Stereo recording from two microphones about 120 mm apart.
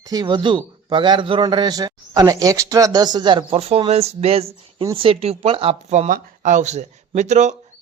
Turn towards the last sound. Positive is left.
turn(degrees=-75)  # may be behind; listen again after turning